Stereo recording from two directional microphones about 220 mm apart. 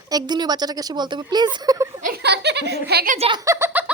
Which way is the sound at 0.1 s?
20° right (ahead or behind).